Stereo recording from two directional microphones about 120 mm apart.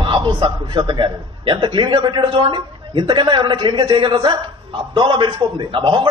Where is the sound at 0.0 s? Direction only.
40° right (ahead or behind).